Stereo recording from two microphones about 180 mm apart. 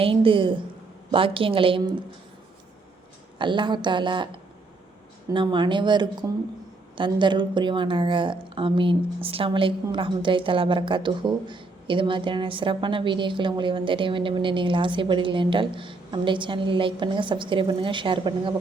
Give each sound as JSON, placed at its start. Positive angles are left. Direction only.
{"t": 0.0, "sound": "a woman's voice", "side_deg": -30}
{"t": 3.3, "sound": "a woman's voice", "side_deg": -25}
{"t": 5.3, "sound": "a woman's voice", "side_deg": -25}